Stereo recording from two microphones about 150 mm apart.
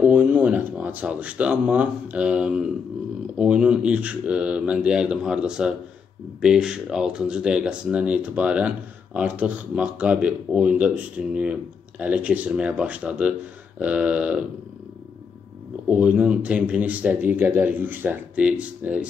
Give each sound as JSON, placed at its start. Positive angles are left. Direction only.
{"t": 0.1, "sound": "speech", "side_deg": -10}
{"t": 15.9, "sound": "speech", "side_deg": -5}